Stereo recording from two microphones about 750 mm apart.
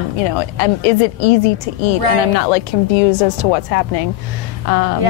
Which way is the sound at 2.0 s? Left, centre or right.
Right.